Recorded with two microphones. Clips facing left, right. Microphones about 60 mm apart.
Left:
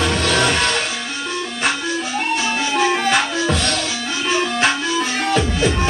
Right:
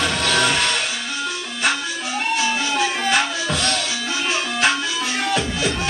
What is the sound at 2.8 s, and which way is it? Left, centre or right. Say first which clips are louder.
Music: left 4 dB; centre.